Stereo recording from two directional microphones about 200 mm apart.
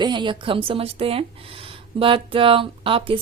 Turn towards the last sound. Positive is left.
turn(degrees=-25)  # may be behind; listen again after turning